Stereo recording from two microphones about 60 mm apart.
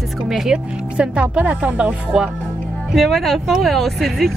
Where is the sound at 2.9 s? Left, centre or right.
Centre.